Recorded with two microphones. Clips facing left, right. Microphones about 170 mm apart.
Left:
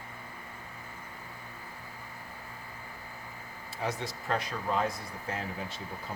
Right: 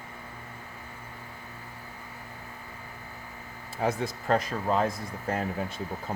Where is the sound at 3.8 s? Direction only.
50° right (ahead or behind).